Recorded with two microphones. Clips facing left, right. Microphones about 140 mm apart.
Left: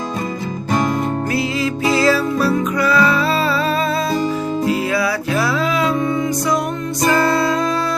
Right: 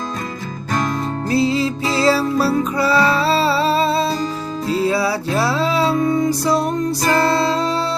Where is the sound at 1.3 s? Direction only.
30° right (ahead or behind).